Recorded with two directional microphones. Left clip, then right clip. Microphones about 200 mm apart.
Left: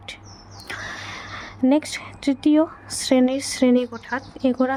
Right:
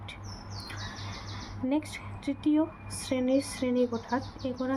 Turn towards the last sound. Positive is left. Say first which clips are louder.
# left 11 dB
turn(degrees=60)  # may be behind; listen again after turning